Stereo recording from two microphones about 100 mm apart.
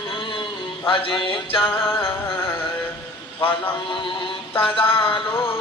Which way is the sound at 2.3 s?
65° left (ahead or behind).